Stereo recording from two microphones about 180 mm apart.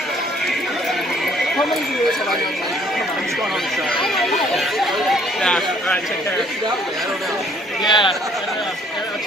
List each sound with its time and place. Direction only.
4.2 s speech: centre (ahead or behind)
7.9 s speech: 25° left (ahead or behind)